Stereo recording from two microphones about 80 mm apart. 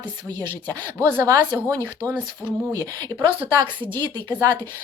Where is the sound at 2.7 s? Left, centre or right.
Right.